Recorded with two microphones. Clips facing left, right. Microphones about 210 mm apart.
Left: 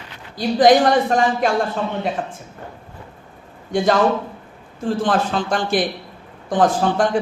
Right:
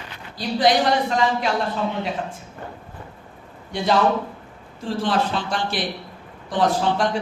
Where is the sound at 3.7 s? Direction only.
45° left (ahead or behind).